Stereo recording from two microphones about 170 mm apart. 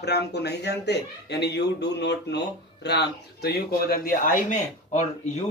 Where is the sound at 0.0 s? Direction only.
75° left (ahead or behind).